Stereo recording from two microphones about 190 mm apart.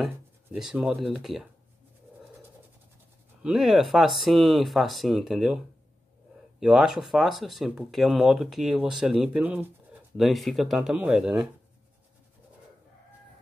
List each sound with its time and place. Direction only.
0.0 s speech: 5° right (ahead or behind)
3.4 s speech: centre (ahead or behind)
6.6 s speech: 5° right (ahead or behind)